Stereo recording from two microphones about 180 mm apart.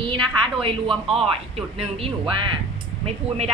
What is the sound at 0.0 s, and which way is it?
A woman's voice, 30° right (ahead or behind).